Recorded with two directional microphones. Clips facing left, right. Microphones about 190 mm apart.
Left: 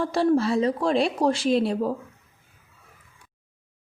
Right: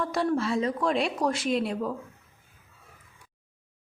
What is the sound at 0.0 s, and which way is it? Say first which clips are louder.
Speech: left 5 dB; 30° left (ahead or behind).